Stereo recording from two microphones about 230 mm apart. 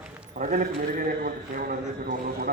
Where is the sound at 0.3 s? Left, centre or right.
Right.